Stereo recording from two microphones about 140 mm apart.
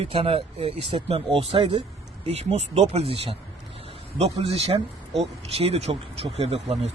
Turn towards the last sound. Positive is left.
turn(degrees=-45)  # may be behind; listen again after turning